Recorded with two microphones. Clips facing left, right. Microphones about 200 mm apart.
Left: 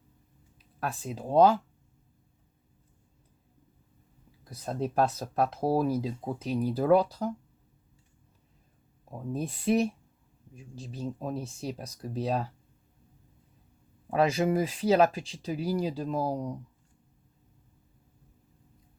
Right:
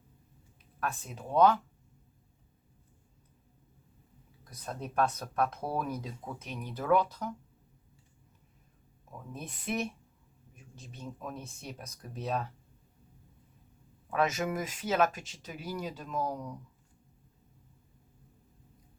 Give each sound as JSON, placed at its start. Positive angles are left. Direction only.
{"t": 0.8, "sound": "speech", "side_deg": 35}
{"t": 4.6, "sound": "speech", "side_deg": 30}
{"t": 9.0, "sound": "speech", "side_deg": 35}
{"t": 14.1, "sound": "speech", "side_deg": 30}